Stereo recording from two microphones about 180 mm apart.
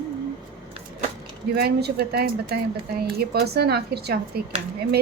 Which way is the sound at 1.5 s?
60° right (ahead or behind).